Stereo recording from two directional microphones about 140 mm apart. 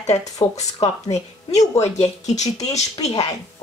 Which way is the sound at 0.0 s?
55° left (ahead or behind).